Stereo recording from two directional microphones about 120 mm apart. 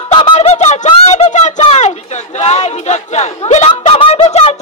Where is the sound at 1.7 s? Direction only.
70° left (ahead or behind).